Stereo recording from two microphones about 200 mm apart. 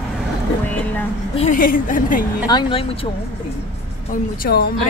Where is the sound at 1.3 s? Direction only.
40° left (ahead or behind).